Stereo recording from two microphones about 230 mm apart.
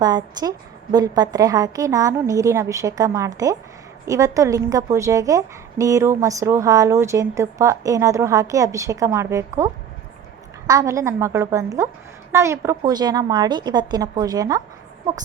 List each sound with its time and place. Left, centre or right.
0.0 s a woman's voice: centre
10.7 s a woman's voice: centre